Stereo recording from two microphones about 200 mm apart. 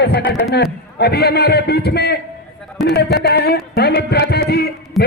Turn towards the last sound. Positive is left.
turn(degrees=50)  # may be behind; listen again after turning